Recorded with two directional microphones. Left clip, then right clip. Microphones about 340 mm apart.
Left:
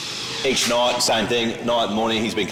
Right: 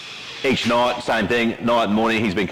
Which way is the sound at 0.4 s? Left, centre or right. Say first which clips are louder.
Right 1 dB; right.